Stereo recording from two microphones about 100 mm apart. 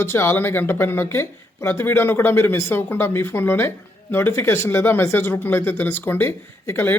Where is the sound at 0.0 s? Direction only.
25° left (ahead or behind).